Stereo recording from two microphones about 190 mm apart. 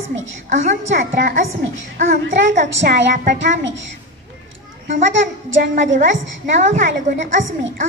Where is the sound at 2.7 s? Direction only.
65° right (ahead or behind).